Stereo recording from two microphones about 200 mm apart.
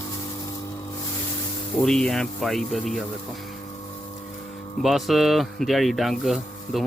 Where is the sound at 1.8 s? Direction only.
5° left (ahead or behind).